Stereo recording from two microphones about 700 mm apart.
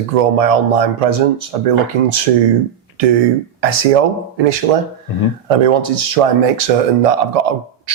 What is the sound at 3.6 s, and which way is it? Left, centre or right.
Speech, right.